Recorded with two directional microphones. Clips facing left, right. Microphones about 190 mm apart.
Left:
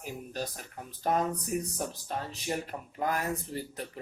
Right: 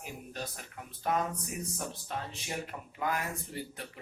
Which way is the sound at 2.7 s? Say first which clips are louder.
Left 2 dB; 40° left (ahead or behind).